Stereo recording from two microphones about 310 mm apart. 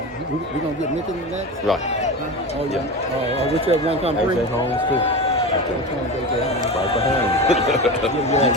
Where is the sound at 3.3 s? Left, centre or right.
Centre.